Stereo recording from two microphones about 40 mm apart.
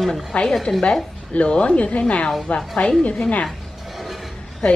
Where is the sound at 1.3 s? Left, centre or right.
Left.